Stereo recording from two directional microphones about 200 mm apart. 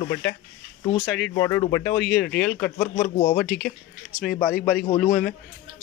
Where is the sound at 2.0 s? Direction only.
5° left (ahead or behind).